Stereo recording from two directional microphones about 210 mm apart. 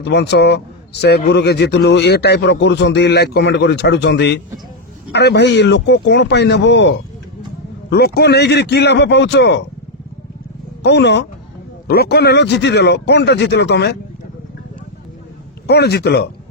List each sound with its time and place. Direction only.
0.0 s speech: 55° left (ahead or behind)
10.8 s speech: 55° left (ahead or behind)
15.6 s speech: 50° left (ahead or behind)